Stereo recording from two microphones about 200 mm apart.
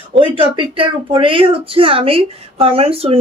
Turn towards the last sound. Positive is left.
turn(degrees=-30)  # may be behind; listen again after turning